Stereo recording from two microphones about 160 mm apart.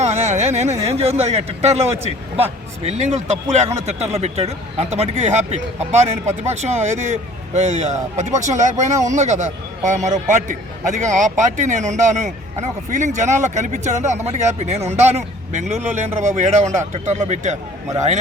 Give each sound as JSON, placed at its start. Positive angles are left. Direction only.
{"t": 0.0, "sound": "speech", "side_deg": -45}